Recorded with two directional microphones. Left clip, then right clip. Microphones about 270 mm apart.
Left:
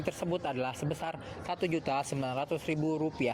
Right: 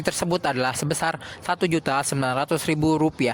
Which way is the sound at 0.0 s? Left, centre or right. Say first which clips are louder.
Right 10 dB; right.